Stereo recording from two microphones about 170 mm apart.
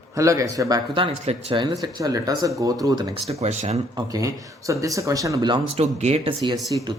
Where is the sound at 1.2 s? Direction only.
35° right (ahead or behind).